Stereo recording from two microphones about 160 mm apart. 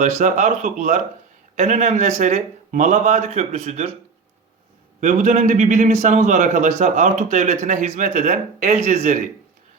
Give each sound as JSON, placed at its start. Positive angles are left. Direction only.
{"t": 0.0, "sound": "a man's voice", "side_deg": -50}
{"t": 4.9, "sound": "a man's voice", "side_deg": -50}